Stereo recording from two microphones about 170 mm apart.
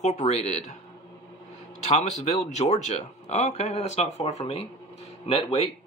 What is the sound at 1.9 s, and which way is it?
Speech, 40° left (ahead or behind).